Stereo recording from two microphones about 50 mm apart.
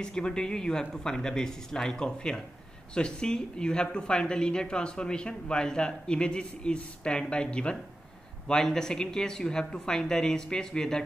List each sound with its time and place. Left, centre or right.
0.0 s speech: centre